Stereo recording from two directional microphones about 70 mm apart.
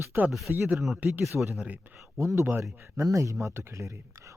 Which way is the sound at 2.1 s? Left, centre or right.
Right.